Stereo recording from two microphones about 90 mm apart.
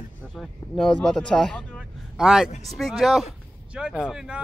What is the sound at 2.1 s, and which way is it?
Speech, 5° right (ahead or behind).